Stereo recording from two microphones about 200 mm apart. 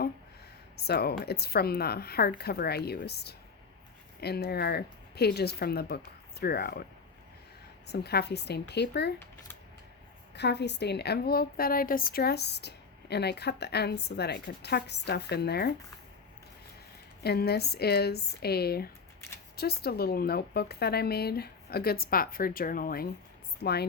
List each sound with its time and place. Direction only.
0.8 s speech: 55° left (ahead or behind)
7.9 s a woman's voice: 55° left (ahead or behind)
10.3 s a woman's voice: 55° left (ahead or behind)
17.2 s speech: 55° left (ahead or behind)